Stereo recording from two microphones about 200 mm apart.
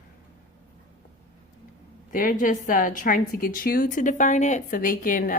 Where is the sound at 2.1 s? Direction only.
40° left (ahead or behind).